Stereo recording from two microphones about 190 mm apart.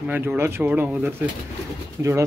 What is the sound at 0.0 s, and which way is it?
A man's voice, 10° right (ahead or behind).